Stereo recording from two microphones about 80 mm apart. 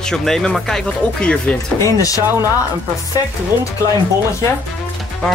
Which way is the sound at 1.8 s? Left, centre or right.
Left.